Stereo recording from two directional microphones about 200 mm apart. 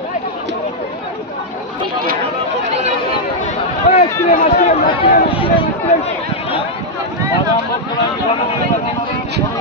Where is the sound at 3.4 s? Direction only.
35° left (ahead or behind).